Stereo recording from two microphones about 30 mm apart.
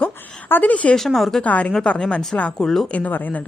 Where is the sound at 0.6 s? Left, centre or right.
Left.